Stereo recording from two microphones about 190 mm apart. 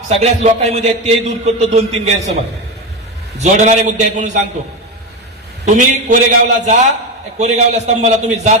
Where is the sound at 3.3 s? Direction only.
40° right (ahead or behind).